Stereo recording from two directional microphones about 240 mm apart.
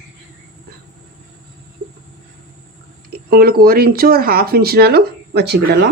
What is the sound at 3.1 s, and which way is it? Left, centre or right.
Speech, right.